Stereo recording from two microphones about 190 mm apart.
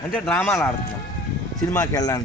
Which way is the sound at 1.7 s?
20° left (ahead or behind).